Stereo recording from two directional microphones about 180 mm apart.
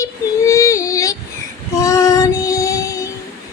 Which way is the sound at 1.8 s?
20° left (ahead or behind).